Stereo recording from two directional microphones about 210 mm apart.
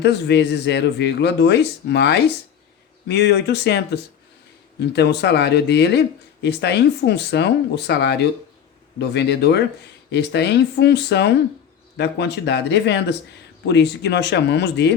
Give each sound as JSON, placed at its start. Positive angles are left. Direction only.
{"t": 0.0, "sound": "speech", "side_deg": 55}